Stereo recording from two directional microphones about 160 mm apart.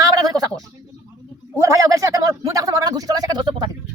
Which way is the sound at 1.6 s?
20° right (ahead or behind).